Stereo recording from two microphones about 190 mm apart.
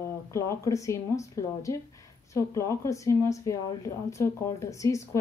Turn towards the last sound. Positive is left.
turn(degrees=15)  # may be behind; listen again after turning